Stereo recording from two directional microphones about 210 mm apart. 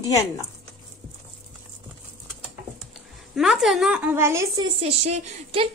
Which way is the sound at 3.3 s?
Centre (ahead or behind).